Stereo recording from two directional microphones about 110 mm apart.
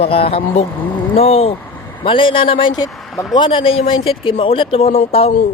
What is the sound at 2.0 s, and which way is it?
Speech, 50° left (ahead or behind).